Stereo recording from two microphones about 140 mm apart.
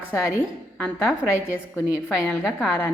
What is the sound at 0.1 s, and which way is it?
A woman's voice, 15° left (ahead or behind).